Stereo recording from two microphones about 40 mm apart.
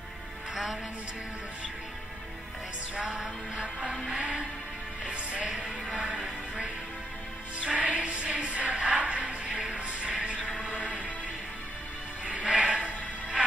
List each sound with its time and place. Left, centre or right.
4.1 s music: right
7.7 s music: right
12.3 s music: right